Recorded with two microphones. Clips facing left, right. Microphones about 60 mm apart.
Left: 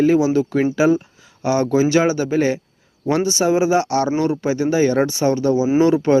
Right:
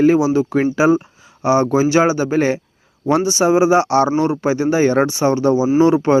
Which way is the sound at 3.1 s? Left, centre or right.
Centre.